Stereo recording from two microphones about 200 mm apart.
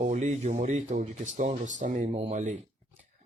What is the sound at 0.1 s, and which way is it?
Speech, 35° right (ahead or behind).